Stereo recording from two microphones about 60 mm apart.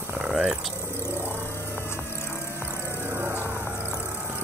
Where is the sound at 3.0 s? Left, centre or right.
Right.